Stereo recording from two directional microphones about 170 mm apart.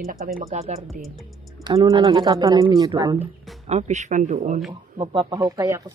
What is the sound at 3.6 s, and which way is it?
Speech, 40° right (ahead or behind).